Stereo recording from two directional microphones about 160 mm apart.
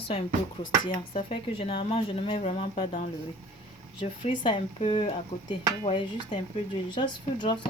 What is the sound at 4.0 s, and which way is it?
Speech, 30° left (ahead or behind).